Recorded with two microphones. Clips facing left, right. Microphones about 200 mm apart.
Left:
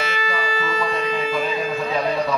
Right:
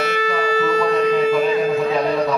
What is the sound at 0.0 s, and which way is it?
Music, 65° right (ahead or behind).